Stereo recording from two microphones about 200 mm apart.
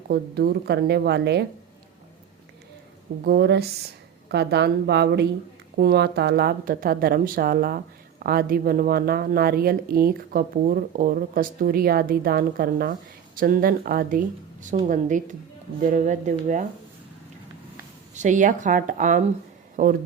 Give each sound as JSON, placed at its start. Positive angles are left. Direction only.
{"t": 0.1, "sound": "speech", "side_deg": -55}
{"t": 3.2, "sound": "speech", "side_deg": -55}
{"t": 18.1, "sound": "speech", "side_deg": -40}